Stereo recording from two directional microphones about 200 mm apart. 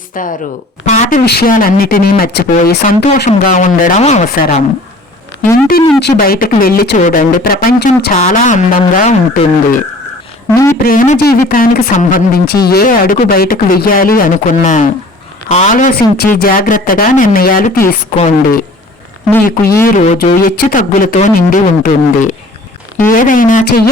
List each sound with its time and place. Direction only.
0.1 s speech: 40° left (ahead or behind)
0.9 s a sound: 35° left (ahead or behind)
1.2 s speech: 55° left (ahead or behind); by 4.6 s 35° left (ahead or behind)
6.1 s speech: 50° left (ahead or behind)
8.1 s speech: 40° left (ahead or behind)
10.5 s speech: 15° left (ahead or behind)
10.8 s speech: 45° left (ahead or behind)
19.8 s speech: 40° left (ahead or behind)